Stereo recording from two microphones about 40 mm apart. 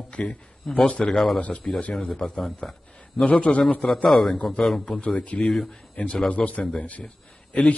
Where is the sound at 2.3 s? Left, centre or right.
Centre.